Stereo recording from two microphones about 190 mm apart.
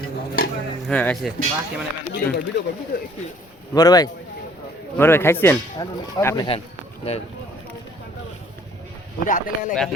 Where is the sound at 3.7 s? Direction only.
20° left (ahead or behind).